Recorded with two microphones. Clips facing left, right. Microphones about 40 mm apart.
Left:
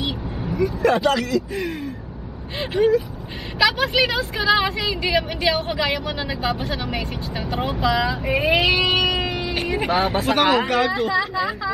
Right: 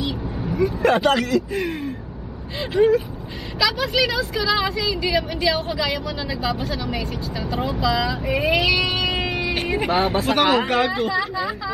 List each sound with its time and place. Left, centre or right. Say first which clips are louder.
0.0 s speech: right 1 dB; centre
3.5 s speech: left 2 dB; centre
6.0 s speech: left 1 dB; left
6.4 s speech: even; centre
8.1 s speech: left 1 dB; centre
8.5 s vehicle: left 2 dB; centre
9.8 s speech: even; centre